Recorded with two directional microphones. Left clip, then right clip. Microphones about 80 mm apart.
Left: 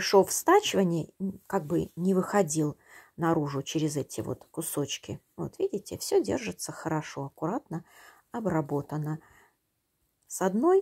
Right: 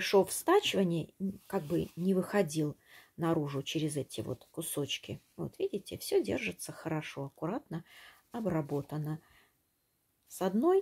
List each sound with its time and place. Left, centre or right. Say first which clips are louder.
0.0 s speech: left 5 dB; left
2.9 s speech: left 6 dB; left
5.5 s speech: left 5 dB; left
8.3 s speech: left 5 dB; left
10.3 s speech: left 5 dB; left